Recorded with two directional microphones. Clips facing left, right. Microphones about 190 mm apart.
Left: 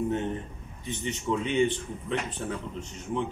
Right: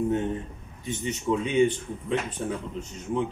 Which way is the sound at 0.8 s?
10° right (ahead or behind).